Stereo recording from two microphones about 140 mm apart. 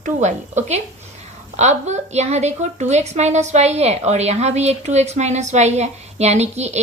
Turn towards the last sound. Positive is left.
turn(degrees=-50)  # may be behind; listen again after turning